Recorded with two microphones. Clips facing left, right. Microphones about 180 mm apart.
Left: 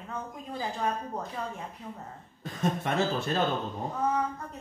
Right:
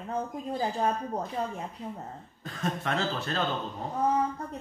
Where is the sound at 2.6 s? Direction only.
15° left (ahead or behind).